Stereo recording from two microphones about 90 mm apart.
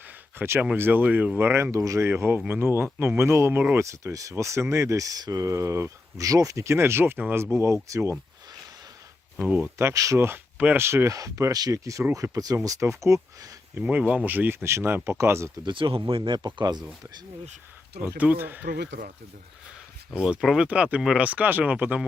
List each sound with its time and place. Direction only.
0.3 s speech: 25° right (ahead or behind)
1.7 s speech: 35° right (ahead or behind)
3.8 s speech: 35° right (ahead or behind)
9.5 s speech: 15° right (ahead or behind)
9.7 s speech: 35° right (ahead or behind)
15.6 s speech: 70° right (ahead or behind)
16.0 s speech: 85° right
16.6 s speech: 50° right (ahead or behind)
18.2 s speech: 20° right (ahead or behind)
20.1 s speech: 15° right (ahead or behind)